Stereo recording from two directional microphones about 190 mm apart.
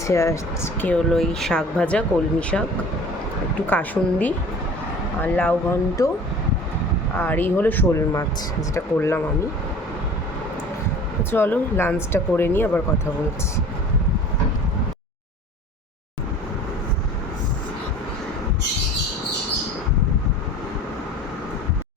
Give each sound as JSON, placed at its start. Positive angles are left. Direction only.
{"t": 0.1, "sound": "speech", "side_deg": 15}
{"t": 7.2, "sound": "speech", "side_deg": 10}
{"t": 11.2, "sound": "speech", "side_deg": 10}